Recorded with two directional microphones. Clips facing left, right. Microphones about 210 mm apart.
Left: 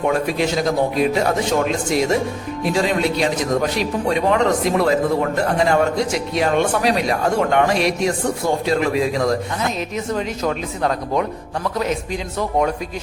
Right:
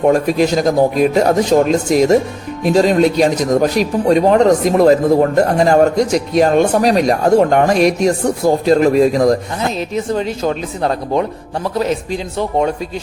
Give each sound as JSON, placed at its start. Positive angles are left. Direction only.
{"t": 0.1, "sound": "a man's voice", "side_deg": -40}